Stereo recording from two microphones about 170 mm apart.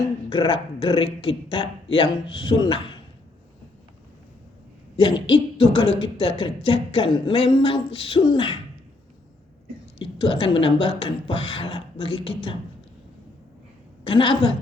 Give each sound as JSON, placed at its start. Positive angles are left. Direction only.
{"t": 0.3, "sound": "speech", "side_deg": 30}
{"t": 5.3, "sound": "speech", "side_deg": 30}
{"t": 10.0, "sound": "speech", "side_deg": 30}
{"t": 14.1, "sound": "speech", "side_deg": 30}